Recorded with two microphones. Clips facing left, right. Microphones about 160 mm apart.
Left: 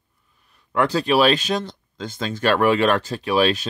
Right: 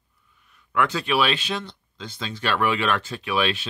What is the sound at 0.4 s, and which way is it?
Speech, 35° left (ahead or behind).